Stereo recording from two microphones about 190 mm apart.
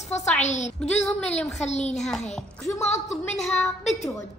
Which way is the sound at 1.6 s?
35° left (ahead or behind).